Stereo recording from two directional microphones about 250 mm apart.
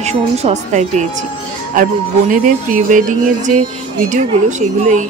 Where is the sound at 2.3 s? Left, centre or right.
Right.